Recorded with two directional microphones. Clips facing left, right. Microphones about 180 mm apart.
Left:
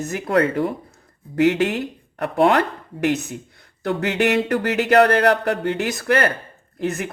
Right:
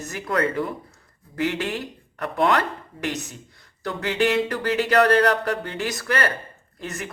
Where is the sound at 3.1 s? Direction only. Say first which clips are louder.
Left 7 dB; 55° left (ahead or behind).